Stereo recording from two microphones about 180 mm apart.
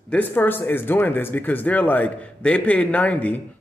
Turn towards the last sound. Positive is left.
turn(degrees=10)  # may be behind; listen again after turning